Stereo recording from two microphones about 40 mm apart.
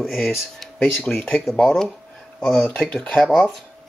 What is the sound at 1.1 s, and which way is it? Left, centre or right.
Speech, left.